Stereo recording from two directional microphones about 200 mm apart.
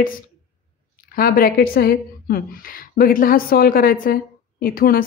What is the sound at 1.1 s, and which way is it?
A woman's voice, 45° left (ahead or behind).